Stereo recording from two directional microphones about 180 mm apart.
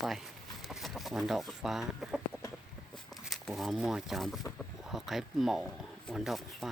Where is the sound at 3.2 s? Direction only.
Centre (ahead or behind).